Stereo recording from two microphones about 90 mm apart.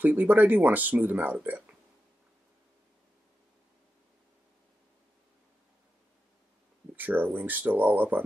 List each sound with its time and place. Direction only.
0.0 s speech: 20° right (ahead or behind)
7.0 s speech: 20° right (ahead or behind)